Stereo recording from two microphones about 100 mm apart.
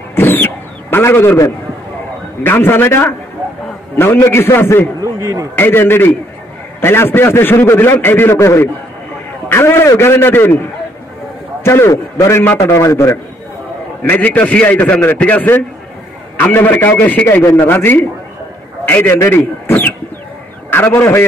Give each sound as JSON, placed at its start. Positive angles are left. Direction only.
{"t": 0.1, "sound": "a sound", "side_deg": 20}
{"t": 2.4, "sound": "a man's voice", "side_deg": 25}
{"t": 5.0, "sound": "speech", "side_deg": -35}
{"t": 5.6, "sound": "a man's voice", "side_deg": 20}
{"t": 14.0, "sound": "a man's voice", "side_deg": 15}